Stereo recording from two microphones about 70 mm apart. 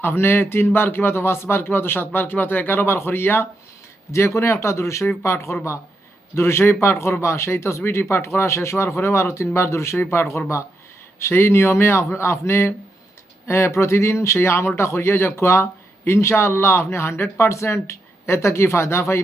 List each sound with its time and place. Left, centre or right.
0.0 s speech: left
4.4 s speech: left